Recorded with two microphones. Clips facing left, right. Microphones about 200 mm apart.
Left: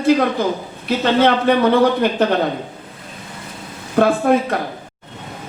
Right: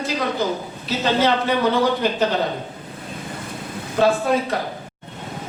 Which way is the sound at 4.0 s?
55° left (ahead or behind).